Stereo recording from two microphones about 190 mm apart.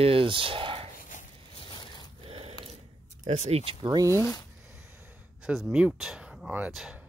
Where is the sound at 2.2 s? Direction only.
30° right (ahead or behind).